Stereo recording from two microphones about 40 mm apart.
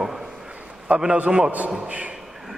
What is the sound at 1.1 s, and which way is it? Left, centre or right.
Speech, right.